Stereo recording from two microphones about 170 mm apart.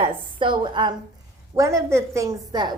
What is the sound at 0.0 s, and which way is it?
A woman's voice, 30° right (ahead or behind).